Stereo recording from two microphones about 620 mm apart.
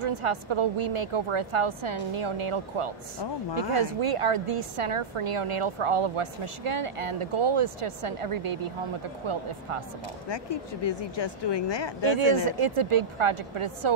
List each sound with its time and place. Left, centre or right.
0.0 s a woman's voice: right
10.3 s speech: left
12.4 s a woman's voice: right